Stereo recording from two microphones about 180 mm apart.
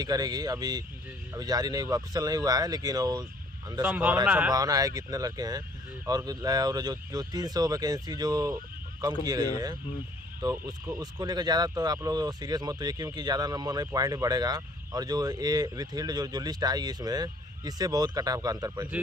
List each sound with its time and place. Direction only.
0.0 s speech: 20° right (ahead or behind)
3.8 s speech: 10° right (ahead or behind)
4.5 s speech: 20° right (ahead or behind)